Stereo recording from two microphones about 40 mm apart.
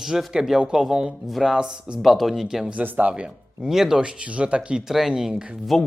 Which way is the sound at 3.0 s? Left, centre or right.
Right.